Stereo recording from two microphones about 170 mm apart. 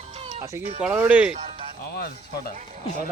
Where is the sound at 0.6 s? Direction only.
40° right (ahead or behind).